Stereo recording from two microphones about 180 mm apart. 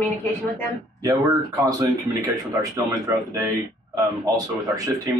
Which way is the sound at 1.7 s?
20° right (ahead or behind).